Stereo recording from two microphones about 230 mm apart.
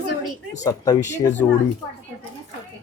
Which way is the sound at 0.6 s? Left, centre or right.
Centre.